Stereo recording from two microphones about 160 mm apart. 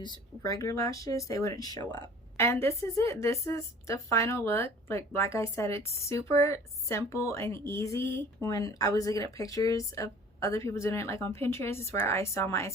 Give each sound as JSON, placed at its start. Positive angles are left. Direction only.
{"t": 0.4, "sound": "a woman's voice", "side_deg": 20}